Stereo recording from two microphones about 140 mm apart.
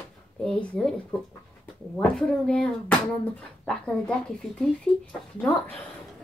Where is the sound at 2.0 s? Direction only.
5° left (ahead or behind).